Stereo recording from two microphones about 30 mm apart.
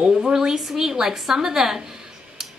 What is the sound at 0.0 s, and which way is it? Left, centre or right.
A woman's voice, right.